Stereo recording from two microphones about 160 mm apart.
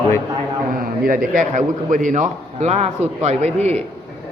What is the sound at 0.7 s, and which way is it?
A man's voice, 65° right (ahead or behind).